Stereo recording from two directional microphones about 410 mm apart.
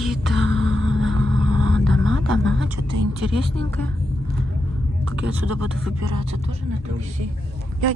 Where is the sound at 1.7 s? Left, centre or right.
Centre.